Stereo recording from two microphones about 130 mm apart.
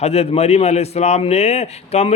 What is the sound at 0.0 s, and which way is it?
A man's voice, 55° left (ahead or behind).